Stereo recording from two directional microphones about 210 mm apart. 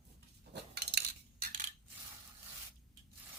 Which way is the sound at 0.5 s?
55° right (ahead or behind).